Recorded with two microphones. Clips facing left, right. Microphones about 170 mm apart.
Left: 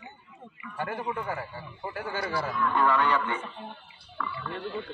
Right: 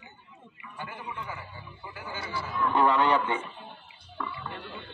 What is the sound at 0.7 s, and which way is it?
A man's voice, 60° left (ahead or behind).